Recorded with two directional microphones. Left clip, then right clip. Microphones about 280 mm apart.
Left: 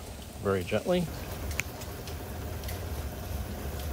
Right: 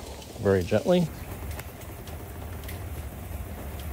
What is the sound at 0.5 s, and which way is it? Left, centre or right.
Speech, right.